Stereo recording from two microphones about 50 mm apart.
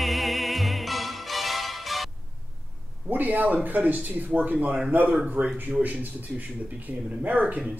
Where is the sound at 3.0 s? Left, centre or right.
Right.